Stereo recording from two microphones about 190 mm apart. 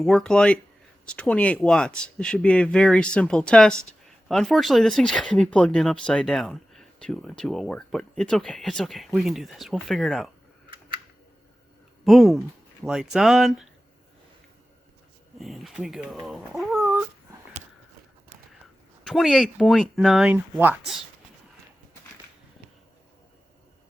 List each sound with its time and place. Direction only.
0.0 s speech: centre (ahead or behind)
12.0 s speech: centre (ahead or behind)
15.4 s speech: centre (ahead or behind)
16.8 s dog: 15° right (ahead or behind)
19.0 s speech: centre (ahead or behind)